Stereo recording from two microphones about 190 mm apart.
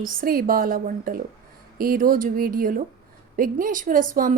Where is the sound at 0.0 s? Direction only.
45° right (ahead or behind).